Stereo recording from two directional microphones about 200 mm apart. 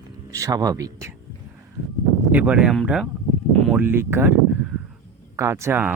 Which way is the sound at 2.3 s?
5° right (ahead or behind).